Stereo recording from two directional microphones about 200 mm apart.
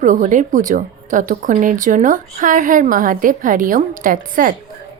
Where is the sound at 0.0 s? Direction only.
40° right (ahead or behind).